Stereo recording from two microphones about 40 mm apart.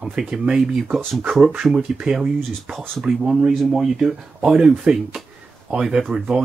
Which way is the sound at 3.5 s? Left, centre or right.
Centre.